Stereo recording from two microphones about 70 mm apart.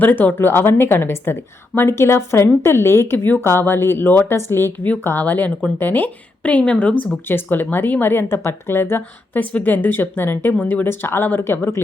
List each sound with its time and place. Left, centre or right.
0.0 s a woman's voice: left
7.3 s a woman's voice: left
10.6 s speech: left
10.8 s a woman's voice: left